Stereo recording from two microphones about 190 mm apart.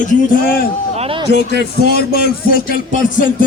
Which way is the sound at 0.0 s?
45° left (ahead or behind).